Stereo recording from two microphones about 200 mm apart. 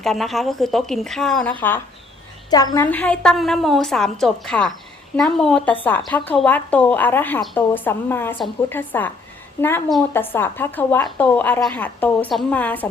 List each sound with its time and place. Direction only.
0.0 s a woman's voice: centre (ahead or behind)
2.5 s a woman's voice: 20° left (ahead or behind)
2.9 s a woman's voice: 5° left (ahead or behind)